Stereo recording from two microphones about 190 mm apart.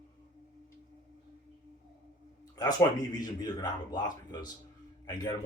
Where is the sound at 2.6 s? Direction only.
20° left (ahead or behind).